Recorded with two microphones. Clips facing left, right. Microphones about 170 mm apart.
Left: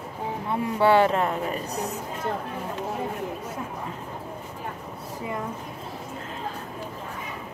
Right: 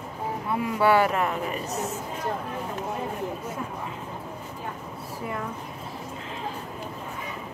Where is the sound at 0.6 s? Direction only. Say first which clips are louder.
Left 2 dB; 25° left (ahead or behind).